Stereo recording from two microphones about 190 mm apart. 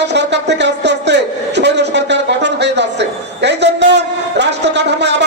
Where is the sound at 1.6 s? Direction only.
65° right (ahead or behind).